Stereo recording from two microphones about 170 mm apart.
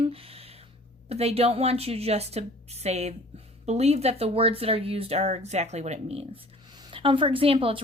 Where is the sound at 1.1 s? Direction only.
35° right (ahead or behind).